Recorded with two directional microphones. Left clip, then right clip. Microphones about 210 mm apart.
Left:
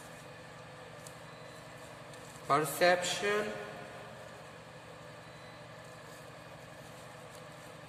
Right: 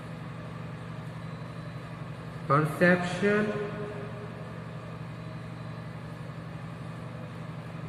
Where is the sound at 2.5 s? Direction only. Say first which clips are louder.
Right 3 dB; 35° left (ahead or behind).